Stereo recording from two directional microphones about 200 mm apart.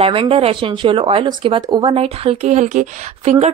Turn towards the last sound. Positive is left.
turn(degrees=-35)  # may be behind; listen again after turning